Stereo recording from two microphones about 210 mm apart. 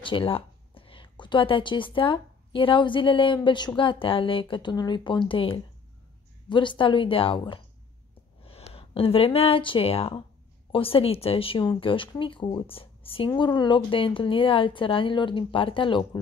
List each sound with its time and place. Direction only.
0.0 s speech: 25° left (ahead or behind)